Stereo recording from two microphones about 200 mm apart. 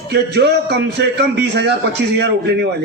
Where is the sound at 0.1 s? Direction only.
55° right (ahead or behind).